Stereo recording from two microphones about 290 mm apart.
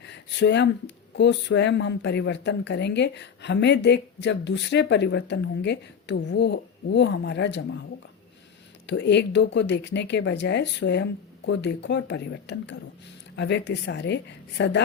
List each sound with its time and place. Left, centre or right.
0.0 s a sound: left
1.1 s speech: left
8.9 s speech: left